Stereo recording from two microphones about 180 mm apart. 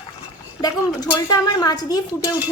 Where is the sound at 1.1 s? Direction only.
20° left (ahead or behind).